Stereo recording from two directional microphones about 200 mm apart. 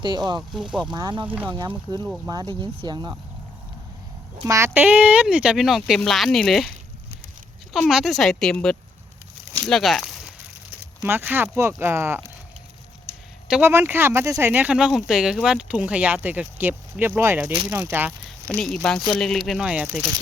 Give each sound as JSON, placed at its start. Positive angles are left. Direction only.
{"t": 0.0, "sound": "speech", "side_deg": -20}
{"t": 0.5, "sound": "speech", "side_deg": -5}
{"t": 0.9, "sound": "speech", "side_deg": -25}
{"t": 4.4, "sound": "speech", "side_deg": -15}
{"t": 7.7, "sound": "speech", "side_deg": 0}
{"t": 13.5, "sound": "speech", "side_deg": -10}
{"t": 18.4, "sound": "speech", "side_deg": 5}